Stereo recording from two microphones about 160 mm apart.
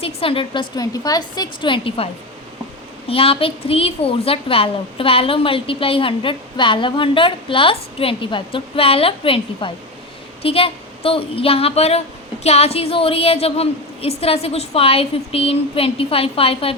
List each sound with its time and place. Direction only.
0.0 s a woman's voice: 35° left (ahead or behind)
3.1 s a woman's voice: 35° left (ahead or behind)